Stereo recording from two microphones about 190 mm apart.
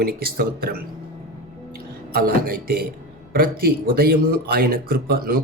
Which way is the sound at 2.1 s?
50° right (ahead or behind).